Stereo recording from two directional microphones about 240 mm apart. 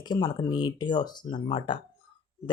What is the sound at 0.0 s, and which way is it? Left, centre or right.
Speech, centre.